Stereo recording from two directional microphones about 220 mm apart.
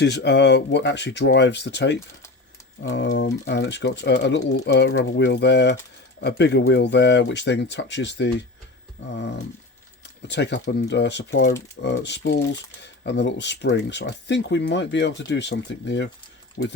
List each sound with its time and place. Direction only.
0.0 s speech: 50° left (ahead or behind)
10.2 s speech: 50° left (ahead or behind)